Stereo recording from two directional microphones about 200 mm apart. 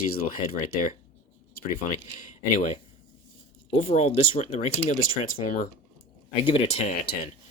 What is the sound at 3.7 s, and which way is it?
Speech, 30° left (ahead or behind).